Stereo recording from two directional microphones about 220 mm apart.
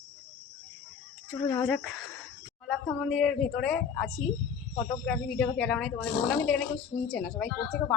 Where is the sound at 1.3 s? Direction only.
10° left (ahead or behind).